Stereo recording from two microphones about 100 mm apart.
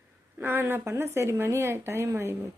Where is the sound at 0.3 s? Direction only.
20° right (ahead or behind).